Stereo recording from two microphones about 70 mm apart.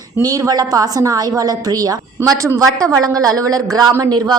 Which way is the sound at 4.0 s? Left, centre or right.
Right.